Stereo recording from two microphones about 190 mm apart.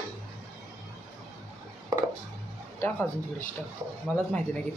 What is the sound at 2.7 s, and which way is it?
Speech, 10° left (ahead or behind).